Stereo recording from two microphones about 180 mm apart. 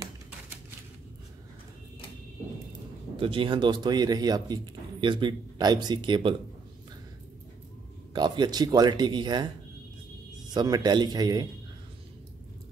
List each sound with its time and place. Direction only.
3.2 s speech: 30° right (ahead or behind)
8.1 s speech: 25° right (ahead or behind)
10.5 s speech: 25° right (ahead or behind)